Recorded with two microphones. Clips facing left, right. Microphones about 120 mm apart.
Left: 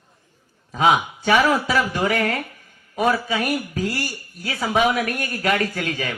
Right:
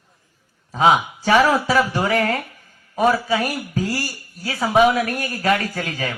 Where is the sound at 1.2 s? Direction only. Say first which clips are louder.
Right 3 dB; 35° right (ahead or behind).